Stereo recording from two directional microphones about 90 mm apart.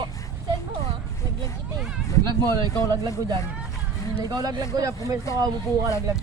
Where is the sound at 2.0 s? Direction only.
35° left (ahead or behind).